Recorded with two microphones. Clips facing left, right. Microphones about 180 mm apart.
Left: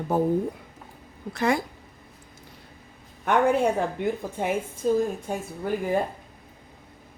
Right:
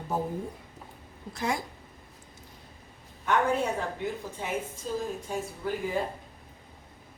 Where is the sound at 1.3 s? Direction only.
65° left (ahead or behind).